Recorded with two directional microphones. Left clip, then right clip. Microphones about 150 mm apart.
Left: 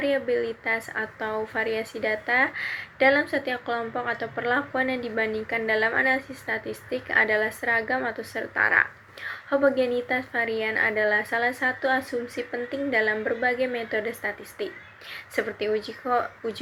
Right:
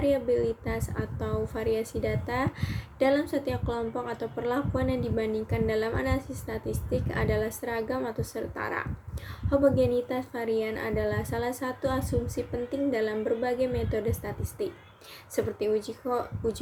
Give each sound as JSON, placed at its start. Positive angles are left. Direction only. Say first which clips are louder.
{"t": 0.0, "sound": "a woman's voice", "louder": "left 1 dB", "side_deg": -35}